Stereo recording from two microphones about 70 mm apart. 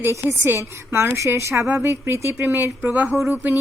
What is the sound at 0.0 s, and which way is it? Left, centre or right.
A woman's voice, right.